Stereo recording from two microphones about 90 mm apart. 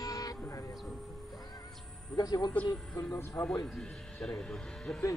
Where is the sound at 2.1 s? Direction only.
45° left (ahead or behind).